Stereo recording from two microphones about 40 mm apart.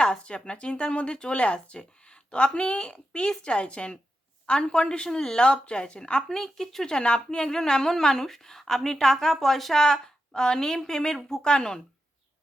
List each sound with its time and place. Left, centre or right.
0.0 s speech: left
6.2 s a woman's voice: centre
6.9 s a woman's voice: left; by 9.8 s centre
9.8 s a woman's voice: centre